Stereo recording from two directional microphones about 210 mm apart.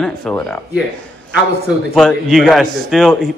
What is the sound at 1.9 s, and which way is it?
A man's voice, centre (ahead or behind).